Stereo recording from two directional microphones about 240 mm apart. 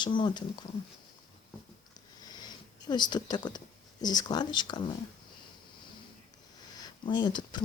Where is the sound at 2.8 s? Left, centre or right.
Centre.